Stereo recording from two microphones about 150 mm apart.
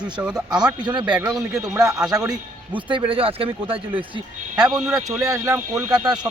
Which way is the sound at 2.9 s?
35° right (ahead or behind).